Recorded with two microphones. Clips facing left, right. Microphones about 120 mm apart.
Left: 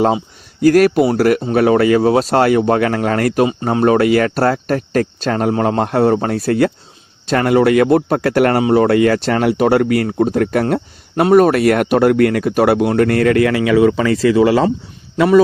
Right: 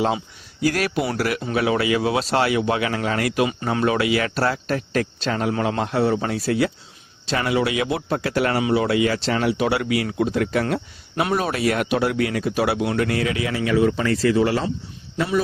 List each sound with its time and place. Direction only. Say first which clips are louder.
0.6 s speech: left 11 dB; 45° left (ahead or behind); by 14.7 s 90° left